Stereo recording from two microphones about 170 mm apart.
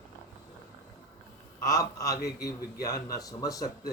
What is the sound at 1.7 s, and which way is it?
Speech, 20° left (ahead or behind).